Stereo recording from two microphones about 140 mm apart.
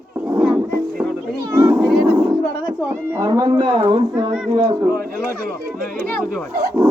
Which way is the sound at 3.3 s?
30° right (ahead or behind).